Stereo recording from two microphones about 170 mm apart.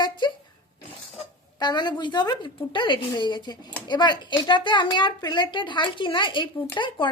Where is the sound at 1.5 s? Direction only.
25° left (ahead or behind).